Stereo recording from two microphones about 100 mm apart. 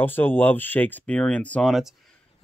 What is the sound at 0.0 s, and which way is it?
Speech, 20° left (ahead or behind).